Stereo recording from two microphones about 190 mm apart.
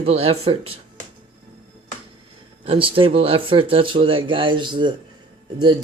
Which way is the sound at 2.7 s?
25° right (ahead or behind).